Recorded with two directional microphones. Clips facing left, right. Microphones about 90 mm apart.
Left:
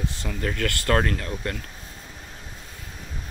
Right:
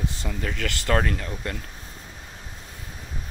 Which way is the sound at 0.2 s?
5° right (ahead or behind).